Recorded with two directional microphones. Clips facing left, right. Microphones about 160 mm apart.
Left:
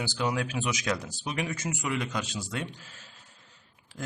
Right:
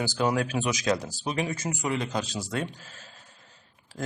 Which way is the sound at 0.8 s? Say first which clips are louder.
Right 5 dB; 30° right (ahead or behind).